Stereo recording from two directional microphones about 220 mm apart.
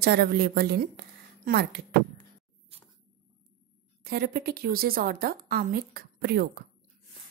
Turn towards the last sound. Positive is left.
turn(degrees=-45)  # may be behind; listen again after turning